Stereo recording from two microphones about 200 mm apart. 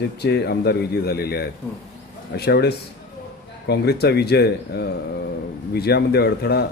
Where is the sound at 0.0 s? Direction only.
55° left (ahead or behind).